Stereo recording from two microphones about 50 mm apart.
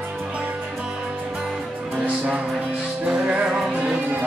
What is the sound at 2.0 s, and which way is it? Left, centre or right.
Music, right.